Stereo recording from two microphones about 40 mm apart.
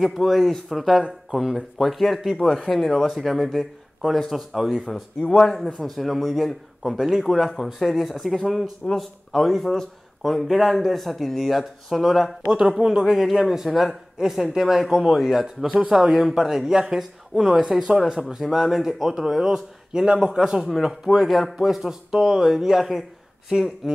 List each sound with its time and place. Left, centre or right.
0.0 s a man's voice: centre
4.6 s speech: centre
5.2 s a man's voice: left
5.8 s a man's voice: centre
12.5 s speech: centre
14.2 s speech: centre
14.6 s a man's voice: centre
15.8 s a man's voice: centre